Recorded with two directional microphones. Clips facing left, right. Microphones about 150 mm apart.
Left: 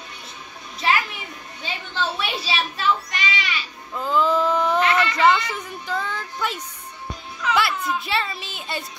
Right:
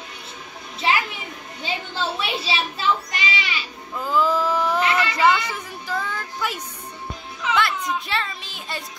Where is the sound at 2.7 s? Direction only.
30° right (ahead or behind).